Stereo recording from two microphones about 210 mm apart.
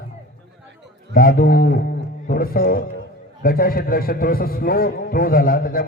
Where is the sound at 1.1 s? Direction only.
45° left (ahead or behind).